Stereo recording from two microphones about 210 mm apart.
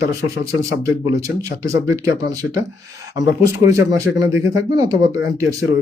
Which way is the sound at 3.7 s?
15° right (ahead or behind).